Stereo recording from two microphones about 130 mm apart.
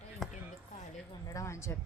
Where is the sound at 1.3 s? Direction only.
20° left (ahead or behind).